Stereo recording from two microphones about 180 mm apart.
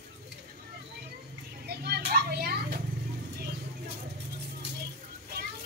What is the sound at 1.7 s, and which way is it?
Children playing, 60° right (ahead or behind).